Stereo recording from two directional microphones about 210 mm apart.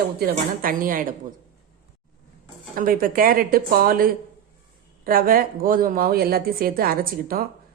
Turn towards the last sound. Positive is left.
turn(degrees=-45)  # may be behind; listen again after turning